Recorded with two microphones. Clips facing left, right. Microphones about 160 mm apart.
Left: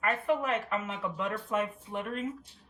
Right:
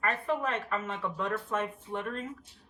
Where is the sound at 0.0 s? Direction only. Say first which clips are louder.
Left 2 dB; 5° left (ahead or behind).